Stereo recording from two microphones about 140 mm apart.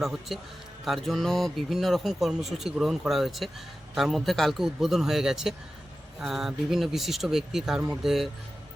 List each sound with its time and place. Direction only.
0.0 s speech: centre (ahead or behind)